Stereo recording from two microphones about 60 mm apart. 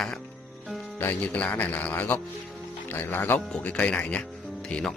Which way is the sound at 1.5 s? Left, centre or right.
Left.